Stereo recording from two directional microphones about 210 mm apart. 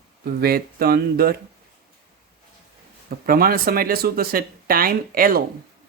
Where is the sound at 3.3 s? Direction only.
45° right (ahead or behind).